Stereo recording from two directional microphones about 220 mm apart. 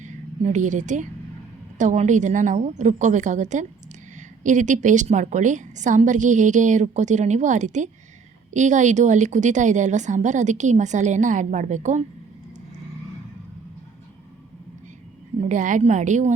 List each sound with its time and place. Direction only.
0.0 s a woman's voice: 35° right (ahead or behind)
15.4 s a woman's voice: 35° right (ahead or behind)